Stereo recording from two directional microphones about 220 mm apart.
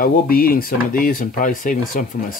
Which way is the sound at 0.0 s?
40° left (ahead or behind).